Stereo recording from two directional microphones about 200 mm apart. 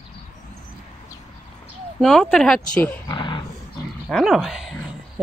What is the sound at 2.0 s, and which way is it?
Speech, centre (ahead or behind).